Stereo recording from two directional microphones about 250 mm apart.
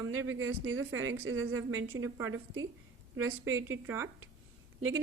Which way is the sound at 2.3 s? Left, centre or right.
Right.